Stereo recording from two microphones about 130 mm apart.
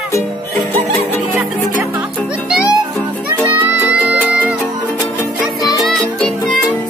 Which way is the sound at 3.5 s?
15° right (ahead or behind).